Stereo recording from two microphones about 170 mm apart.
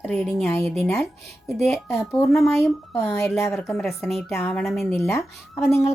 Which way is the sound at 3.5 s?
5° left (ahead or behind).